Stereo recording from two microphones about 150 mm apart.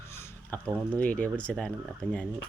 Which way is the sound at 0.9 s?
10° left (ahead or behind).